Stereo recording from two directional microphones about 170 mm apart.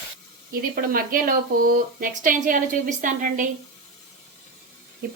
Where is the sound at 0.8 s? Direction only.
55° right (ahead or behind).